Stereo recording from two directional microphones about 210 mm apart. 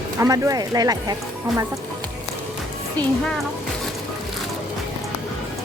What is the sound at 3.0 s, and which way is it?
Speech, 5° left (ahead or behind).